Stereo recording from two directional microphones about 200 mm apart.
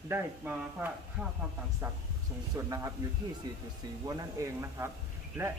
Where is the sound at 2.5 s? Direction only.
15° right (ahead or behind).